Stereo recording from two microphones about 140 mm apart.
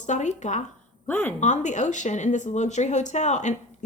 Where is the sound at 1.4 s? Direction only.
60° left (ahead or behind).